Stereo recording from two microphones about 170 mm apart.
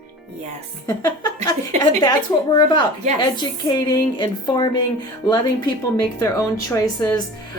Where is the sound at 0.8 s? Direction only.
25° left (ahead or behind).